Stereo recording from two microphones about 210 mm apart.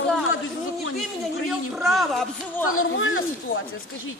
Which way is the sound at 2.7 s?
70° left (ahead or behind).